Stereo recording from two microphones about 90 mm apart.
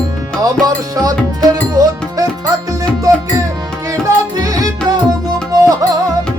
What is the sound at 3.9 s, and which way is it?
Music, 40° right (ahead or behind).